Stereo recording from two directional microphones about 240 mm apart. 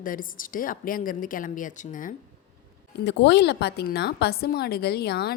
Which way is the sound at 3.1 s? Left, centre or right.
Left.